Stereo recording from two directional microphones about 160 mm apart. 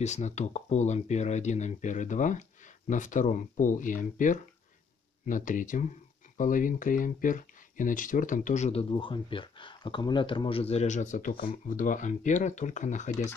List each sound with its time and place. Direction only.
0.0 s speech: 45° left (ahead or behind)
8.9 s speech: 30° left (ahead or behind); by 13.3 s 50° left (ahead or behind)